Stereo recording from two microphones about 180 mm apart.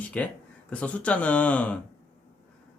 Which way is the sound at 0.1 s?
5° left (ahead or behind).